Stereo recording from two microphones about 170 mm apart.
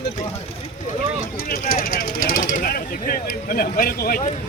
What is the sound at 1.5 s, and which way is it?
Speech, 60° left (ahead or behind).